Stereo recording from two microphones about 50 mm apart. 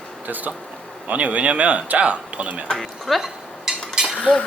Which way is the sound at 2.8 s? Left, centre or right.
Centre.